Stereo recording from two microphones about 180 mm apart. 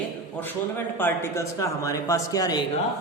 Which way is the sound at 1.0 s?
15° left (ahead or behind).